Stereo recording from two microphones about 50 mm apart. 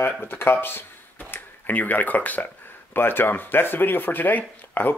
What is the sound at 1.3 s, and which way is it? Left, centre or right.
Speech, left.